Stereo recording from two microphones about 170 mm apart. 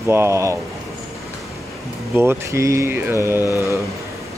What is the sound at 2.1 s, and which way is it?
Speech, 15° right (ahead or behind).